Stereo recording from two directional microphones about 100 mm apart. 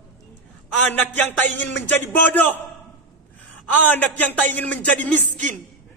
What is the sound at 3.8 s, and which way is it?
Speech, 15° left (ahead or behind).